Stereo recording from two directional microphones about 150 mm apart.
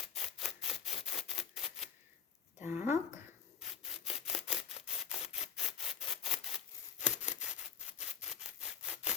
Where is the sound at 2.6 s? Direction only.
15° right (ahead or behind).